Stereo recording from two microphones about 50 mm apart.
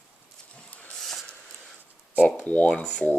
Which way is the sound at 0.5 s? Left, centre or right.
Left.